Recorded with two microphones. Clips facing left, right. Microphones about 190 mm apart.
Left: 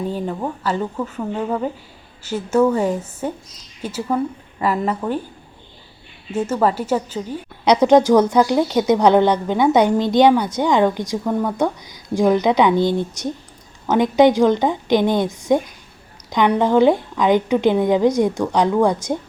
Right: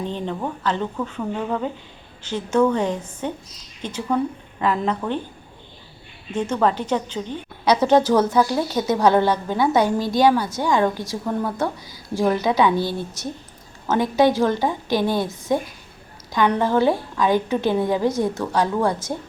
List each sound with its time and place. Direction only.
0.0 s a woman's voice: 5° left (ahead or behind)
6.3 s a woman's voice: 5° left (ahead or behind)